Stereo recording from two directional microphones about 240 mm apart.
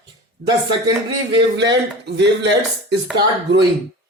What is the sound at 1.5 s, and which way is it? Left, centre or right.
Speech, right.